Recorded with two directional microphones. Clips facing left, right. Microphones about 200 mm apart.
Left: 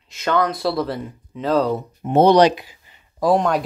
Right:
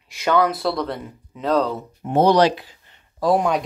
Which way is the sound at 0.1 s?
10° right (ahead or behind).